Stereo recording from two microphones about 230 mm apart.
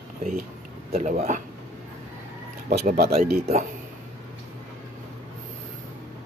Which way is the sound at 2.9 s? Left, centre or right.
Right.